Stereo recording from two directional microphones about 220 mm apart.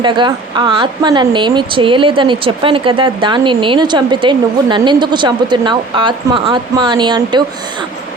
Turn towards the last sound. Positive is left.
turn(degrees=-20)  # may be behind; listen again after turning